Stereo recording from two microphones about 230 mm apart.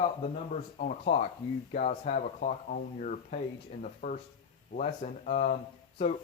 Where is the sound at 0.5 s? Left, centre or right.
Left.